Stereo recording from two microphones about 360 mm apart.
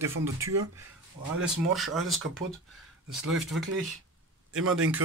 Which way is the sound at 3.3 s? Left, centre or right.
Centre.